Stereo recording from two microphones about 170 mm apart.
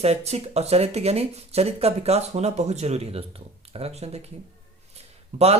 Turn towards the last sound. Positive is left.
turn(degrees=-40)  # may be behind; listen again after turning